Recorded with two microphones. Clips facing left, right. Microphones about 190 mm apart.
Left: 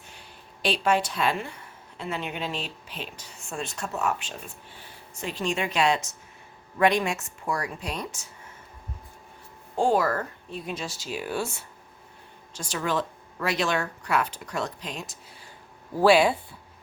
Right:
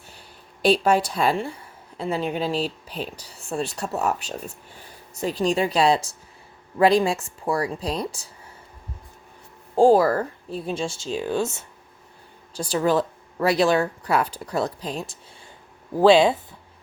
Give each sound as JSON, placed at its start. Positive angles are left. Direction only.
{"t": 0.6, "sound": "speech", "side_deg": -40}
{"t": 9.7, "sound": "speech", "side_deg": -35}
{"t": 12.5, "sound": "speech", "side_deg": -35}